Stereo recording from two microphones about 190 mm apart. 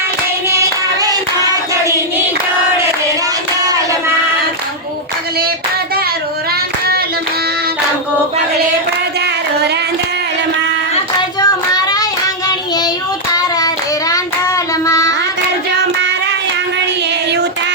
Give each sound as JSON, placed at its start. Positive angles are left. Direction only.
{"t": 0.4, "sound": "hands", "side_deg": -15}
{"t": 9.2, "sound": "singing", "side_deg": -60}
{"t": 11.3, "sound": "child singing", "side_deg": 20}
{"t": 14.1, "sound": "child singing", "side_deg": 15}